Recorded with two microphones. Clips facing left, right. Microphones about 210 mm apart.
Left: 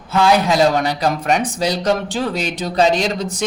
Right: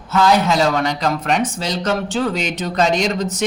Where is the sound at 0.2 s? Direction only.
10° left (ahead or behind).